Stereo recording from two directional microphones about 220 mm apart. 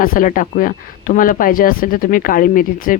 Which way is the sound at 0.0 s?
40° left (ahead or behind).